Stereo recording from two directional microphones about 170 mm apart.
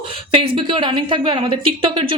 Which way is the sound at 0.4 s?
30° right (ahead or behind).